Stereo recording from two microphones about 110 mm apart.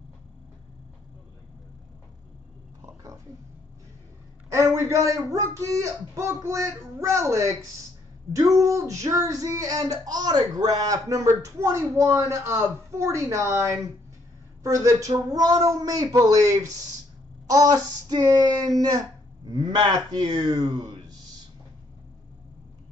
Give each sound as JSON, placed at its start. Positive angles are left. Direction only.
{"t": 2.8, "sound": "roaring cats", "side_deg": -30}
{"t": 4.5, "sound": "a sound", "side_deg": -25}
{"t": 14.6, "sound": "a woman's voice", "side_deg": -30}